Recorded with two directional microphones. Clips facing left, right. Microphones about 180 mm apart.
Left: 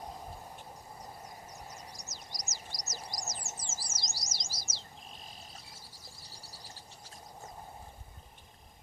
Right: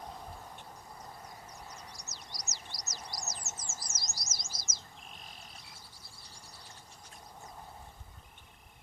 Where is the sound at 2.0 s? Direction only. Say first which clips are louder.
Left 1 dB; 45° left (ahead or behind).